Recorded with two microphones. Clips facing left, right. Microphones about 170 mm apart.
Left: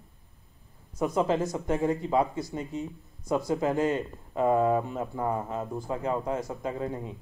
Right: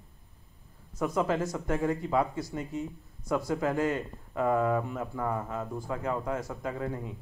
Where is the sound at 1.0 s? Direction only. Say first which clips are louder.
Left 2 dB; 25° left (ahead or behind).